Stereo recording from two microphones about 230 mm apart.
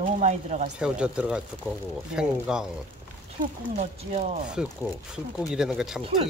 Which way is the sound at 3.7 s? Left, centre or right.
Right.